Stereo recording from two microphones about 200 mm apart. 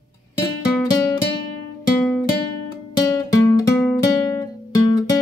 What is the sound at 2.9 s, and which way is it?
Music, 15° left (ahead or behind).